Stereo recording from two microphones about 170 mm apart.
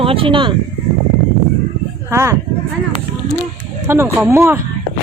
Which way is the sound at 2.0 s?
15° right (ahead or behind).